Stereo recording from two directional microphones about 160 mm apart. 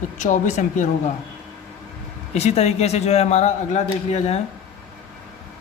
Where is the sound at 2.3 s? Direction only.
40° left (ahead or behind).